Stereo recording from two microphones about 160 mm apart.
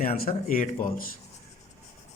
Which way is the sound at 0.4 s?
55° left (ahead or behind).